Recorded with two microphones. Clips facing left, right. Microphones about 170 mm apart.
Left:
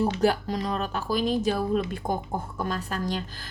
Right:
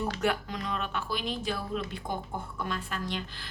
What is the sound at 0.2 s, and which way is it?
Speech, 35° left (ahead or behind).